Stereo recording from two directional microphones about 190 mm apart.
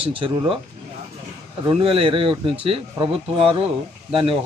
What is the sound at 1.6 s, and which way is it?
A man's voice, 30° right (ahead or behind).